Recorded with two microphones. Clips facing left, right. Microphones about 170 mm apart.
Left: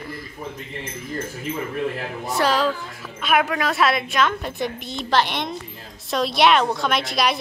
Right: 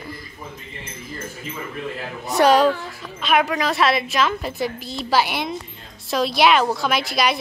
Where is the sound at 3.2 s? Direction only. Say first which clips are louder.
Right 1 dB; centre (ahead or behind).